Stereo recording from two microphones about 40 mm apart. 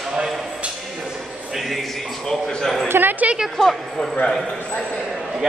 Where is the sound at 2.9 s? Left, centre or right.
Right.